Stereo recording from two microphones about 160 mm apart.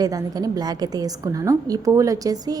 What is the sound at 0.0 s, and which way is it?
A woman's voice, 25° right (ahead or behind).